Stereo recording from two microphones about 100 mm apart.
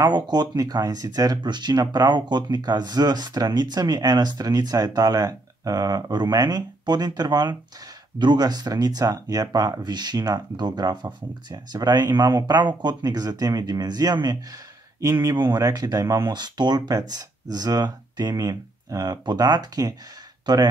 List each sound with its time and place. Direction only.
0.0 s speech: 45° right (ahead or behind)